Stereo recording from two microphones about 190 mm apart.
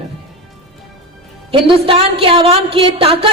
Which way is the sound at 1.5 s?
30° right (ahead or behind).